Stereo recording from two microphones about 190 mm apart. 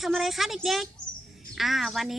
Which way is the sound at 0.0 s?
Centre (ahead or behind).